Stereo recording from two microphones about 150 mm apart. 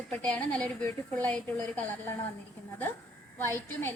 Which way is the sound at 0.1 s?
10° left (ahead or behind).